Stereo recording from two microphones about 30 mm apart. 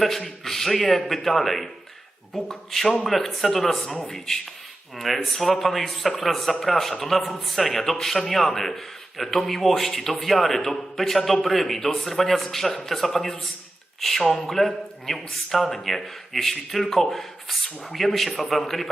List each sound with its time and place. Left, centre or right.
0.4 s a man's voice: centre
2.7 s a man's voice: centre
4.9 s a man's voice: centre